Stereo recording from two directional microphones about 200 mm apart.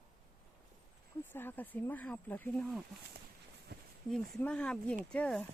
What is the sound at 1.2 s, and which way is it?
Speech, 10° left (ahead or behind).